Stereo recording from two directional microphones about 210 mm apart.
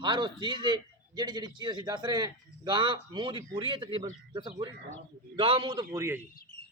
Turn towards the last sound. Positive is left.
turn(degrees=-15)  # may be behind; listen again after turning